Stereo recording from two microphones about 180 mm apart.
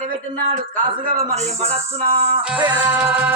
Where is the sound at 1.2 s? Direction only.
35° right (ahead or behind).